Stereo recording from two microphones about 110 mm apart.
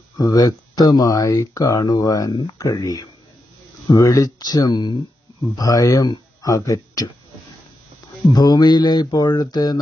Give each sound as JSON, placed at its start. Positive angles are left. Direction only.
{"t": 0.2, "sound": "speech", "side_deg": 35}
{"t": 8.3, "sound": "speech", "side_deg": 35}